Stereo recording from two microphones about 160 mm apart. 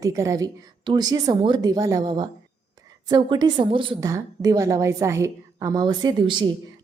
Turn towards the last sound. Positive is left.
turn(degrees=-30)  # may be behind; listen again after turning